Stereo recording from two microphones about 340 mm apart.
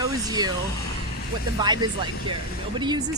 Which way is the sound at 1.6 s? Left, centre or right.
Centre.